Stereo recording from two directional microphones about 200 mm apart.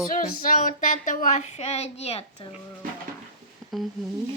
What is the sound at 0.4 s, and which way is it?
A woman's voice, 40° left (ahead or behind).